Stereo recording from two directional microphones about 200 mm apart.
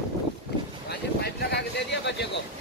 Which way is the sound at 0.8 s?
55° left (ahead or behind).